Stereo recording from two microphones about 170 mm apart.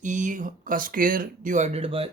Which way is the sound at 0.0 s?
45° right (ahead or behind).